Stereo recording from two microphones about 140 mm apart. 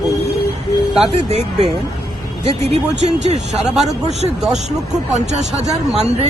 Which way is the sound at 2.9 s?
50° right (ahead or behind).